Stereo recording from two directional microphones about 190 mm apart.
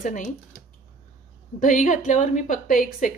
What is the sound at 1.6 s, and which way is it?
A woman's voice, 40° left (ahead or behind).